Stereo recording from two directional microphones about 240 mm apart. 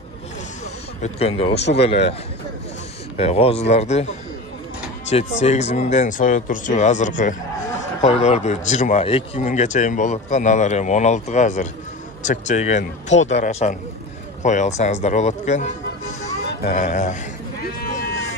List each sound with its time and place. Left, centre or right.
1.0 s speech: left
1.5 s speech: left
1.8 s speech: left
3.2 s speech: left
5.4 s speech: left